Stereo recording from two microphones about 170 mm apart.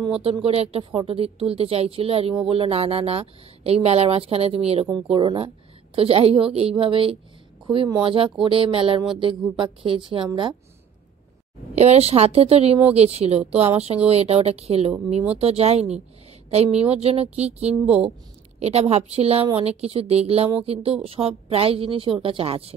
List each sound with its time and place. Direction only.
0.0 s a woman's voice: 35° right (ahead or behind)
11.7 s a woman's voice: 40° right (ahead or behind)